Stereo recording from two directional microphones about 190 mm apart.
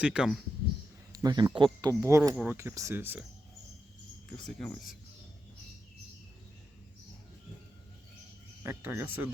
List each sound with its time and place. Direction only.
0.0 s speech: 5° right (ahead or behind)
1.1 s speech: 20° right (ahead or behind)
4.3 s speech: centre (ahead or behind)
8.6 s speech: 10° right (ahead or behind)